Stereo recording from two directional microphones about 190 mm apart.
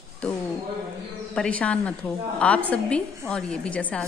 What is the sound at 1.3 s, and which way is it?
A woman's voice, 5° left (ahead or behind).